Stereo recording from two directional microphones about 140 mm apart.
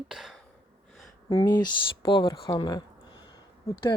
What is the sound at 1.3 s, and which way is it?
Speech, 30° left (ahead or behind).